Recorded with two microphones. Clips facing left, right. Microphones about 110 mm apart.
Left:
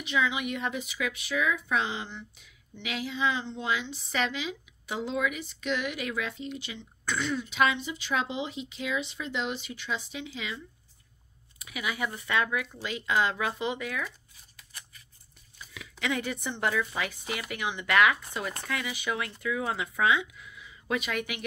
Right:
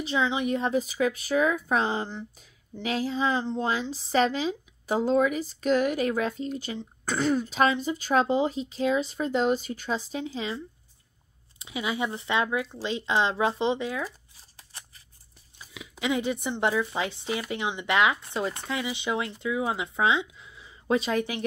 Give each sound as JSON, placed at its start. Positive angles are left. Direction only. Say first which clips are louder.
{"t": 0.0, "sound": "a woman's voice", "louder": "right 3 dB", "side_deg": -30}
{"t": 15.7, "sound": "speech", "louder": "right 4 dB", "side_deg": -20}